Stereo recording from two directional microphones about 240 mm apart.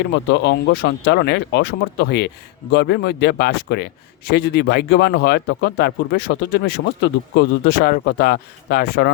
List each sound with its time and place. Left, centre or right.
0.0 s speech: left